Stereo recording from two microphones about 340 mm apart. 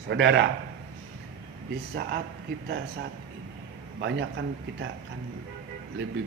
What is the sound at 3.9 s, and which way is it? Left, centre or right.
Speech, right.